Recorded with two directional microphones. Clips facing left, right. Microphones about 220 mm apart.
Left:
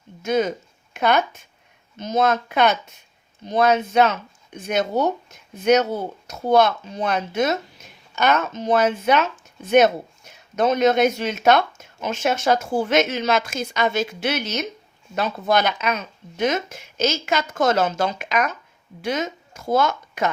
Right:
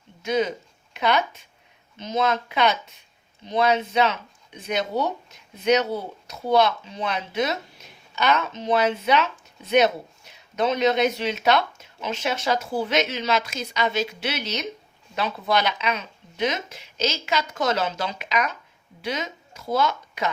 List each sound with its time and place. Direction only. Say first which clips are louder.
0.2 s speech: left 3 dB; 45° left (ahead or behind)